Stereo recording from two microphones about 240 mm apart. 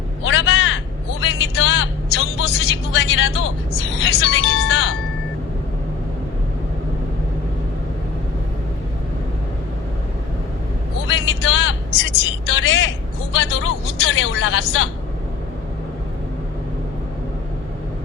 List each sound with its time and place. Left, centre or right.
0.3 s a sound: left
1.2 s vehicle: left
4.0 s speech: left
11.1 s vehicle: left
13.3 s speech: left